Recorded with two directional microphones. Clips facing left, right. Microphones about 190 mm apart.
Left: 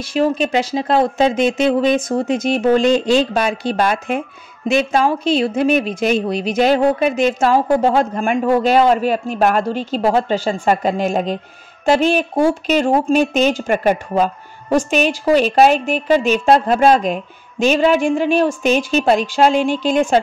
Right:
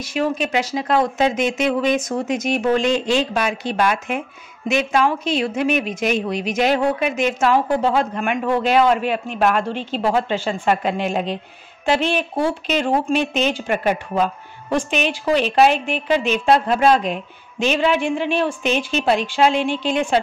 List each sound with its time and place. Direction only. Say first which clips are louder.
0.0 s speech: left 4 dB; 30° left (ahead or behind)